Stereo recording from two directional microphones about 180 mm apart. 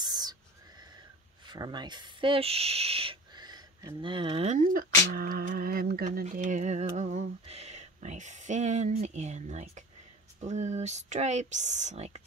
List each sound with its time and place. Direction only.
0.0 s neigh: 20° right (ahead or behind)
1.4 s speech: 25° right (ahead or behind)
4.6 s speech: 50° right (ahead or behind)